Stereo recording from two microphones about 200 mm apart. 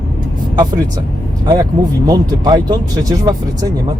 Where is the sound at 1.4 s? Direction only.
20° right (ahead or behind).